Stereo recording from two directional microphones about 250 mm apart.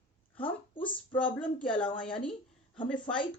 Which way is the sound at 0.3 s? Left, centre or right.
Centre.